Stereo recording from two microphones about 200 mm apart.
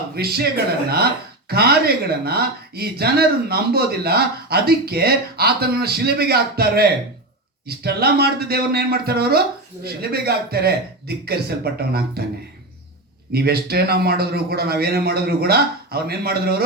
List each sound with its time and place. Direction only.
0.2 s speech: 50° right (ahead or behind)
7.9 s speech: 50° right (ahead or behind)
13.3 s speech: 50° right (ahead or behind)